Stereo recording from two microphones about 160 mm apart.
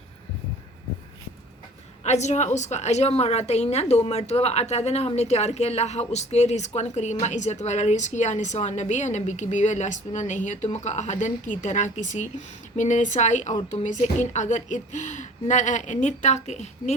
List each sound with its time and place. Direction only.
2.0 s a woman's voice: 45° left (ahead or behind)